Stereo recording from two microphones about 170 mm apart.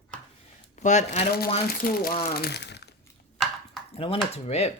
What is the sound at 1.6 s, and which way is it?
Speech, 60° left (ahead or behind).